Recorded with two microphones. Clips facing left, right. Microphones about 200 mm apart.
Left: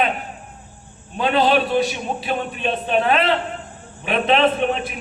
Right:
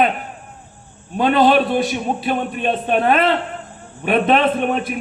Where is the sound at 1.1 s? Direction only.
45° right (ahead or behind).